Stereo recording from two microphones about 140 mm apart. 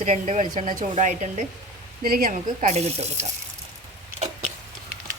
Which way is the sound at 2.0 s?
85° right.